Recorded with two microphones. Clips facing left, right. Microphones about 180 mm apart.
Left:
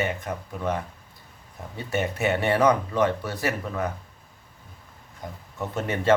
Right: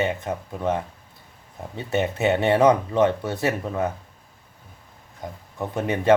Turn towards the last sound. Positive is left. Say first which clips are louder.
# right 3 dB
turn(degrees=-15)  # may be behind; listen again after turning